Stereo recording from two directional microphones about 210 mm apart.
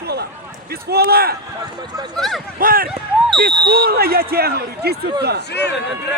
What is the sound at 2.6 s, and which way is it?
Speech, 45° right (ahead or behind).